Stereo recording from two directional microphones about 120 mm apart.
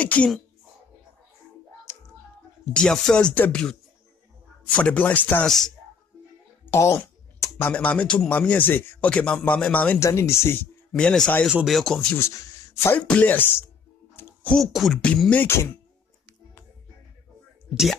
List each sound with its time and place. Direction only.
0.0 s speech: 10° left (ahead or behind)
1.9 s typing: 25° left (ahead or behind)
2.7 s speech: 5° left (ahead or behind)
6.6 s speech: 20° left (ahead or behind)
9.9 s speech: 25° left (ahead or behind)
10.9 s speech: 5° left (ahead or behind)
11.4 s beatboxing: 5° right (ahead or behind)
12.2 s a man's voice: 25° left (ahead or behind)
12.9 s speech: 10° left (ahead or behind)
14.1 s a sound: 15° left (ahead or behind)
14.6 s beatboxing: centre (ahead or behind)
15.4 s speech: 20° left (ahead or behind)